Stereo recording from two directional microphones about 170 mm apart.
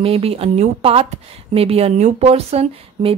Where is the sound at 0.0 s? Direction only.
35° right (ahead or behind).